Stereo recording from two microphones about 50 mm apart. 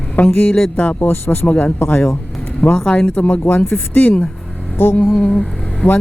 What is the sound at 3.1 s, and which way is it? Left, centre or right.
Speech, left.